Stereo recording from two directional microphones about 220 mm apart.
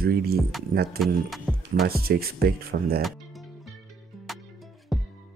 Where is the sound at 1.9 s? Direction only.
45° right (ahead or behind).